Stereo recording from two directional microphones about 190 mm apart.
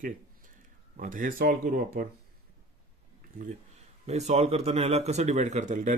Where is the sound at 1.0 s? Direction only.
45° right (ahead or behind).